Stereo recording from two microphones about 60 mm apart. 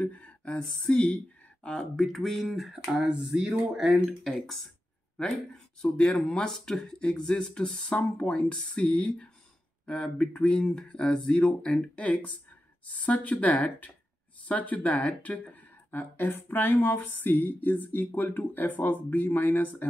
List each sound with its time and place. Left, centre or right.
0.0 s a sound: left
0.6 s speech: centre
2.0 s speech: centre
4.2 s speech: centre
5.8 s speech: centre; by 19.9 s left